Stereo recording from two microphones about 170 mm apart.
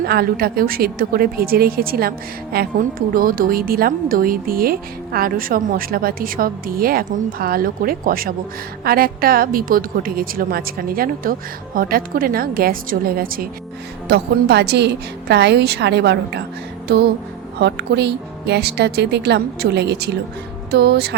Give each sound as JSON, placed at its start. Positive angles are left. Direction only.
{"t": 0.0, "sound": "a woman's voice", "side_deg": -65}
{"t": 14.1, "sound": "a woman's voice", "side_deg": -75}